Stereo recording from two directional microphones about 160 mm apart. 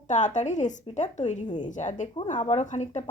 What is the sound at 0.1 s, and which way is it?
Speech, 50° left (ahead or behind).